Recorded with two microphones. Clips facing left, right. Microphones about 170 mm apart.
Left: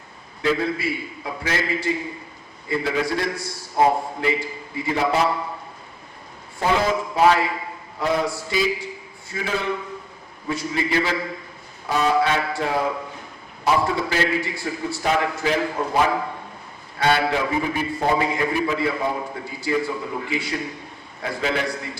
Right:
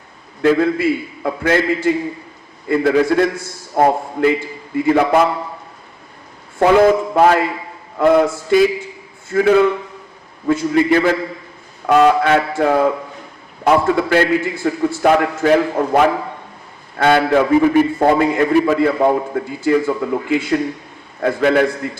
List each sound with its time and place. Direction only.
0.4 s a man's voice: 55° right (ahead or behind)
6.6 s a man's voice: 55° right (ahead or behind)
11.9 s a man's voice: 65° right (ahead or behind)
17.0 s a man's voice: 50° right (ahead or behind)